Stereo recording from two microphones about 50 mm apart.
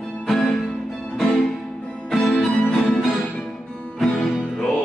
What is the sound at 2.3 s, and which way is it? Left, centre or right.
Music, centre.